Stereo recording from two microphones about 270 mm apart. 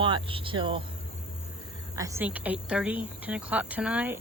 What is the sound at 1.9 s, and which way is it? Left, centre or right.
Speech, centre.